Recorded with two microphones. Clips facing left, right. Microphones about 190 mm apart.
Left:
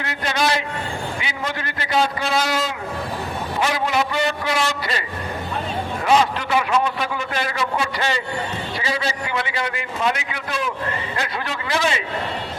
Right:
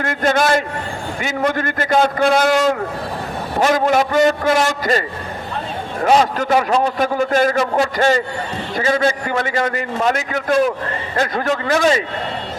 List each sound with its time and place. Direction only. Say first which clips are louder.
0.0 s a man's voice: right 6 dB; 50° right (ahead or behind)